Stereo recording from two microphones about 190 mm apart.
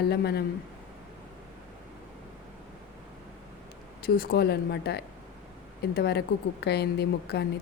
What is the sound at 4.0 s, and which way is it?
A woman's voice, 50° left (ahead or behind).